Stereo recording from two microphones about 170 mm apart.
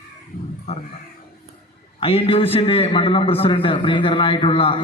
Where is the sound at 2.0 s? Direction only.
35° left (ahead or behind).